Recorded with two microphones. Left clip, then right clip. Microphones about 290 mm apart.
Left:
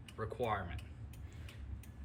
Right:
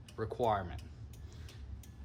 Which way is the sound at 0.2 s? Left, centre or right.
Centre.